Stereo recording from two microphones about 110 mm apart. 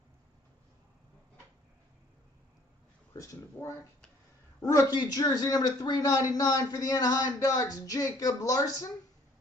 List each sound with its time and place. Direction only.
3.5 s speech: 20° left (ahead or behind)
4.6 s speech: 30° left (ahead or behind)